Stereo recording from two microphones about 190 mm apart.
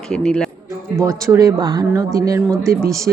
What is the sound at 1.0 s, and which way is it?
A woman's voice, 15° right (ahead or behind).